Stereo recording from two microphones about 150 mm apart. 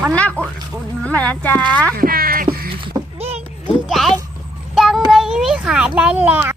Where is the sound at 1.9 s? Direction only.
75° right (ahead or behind).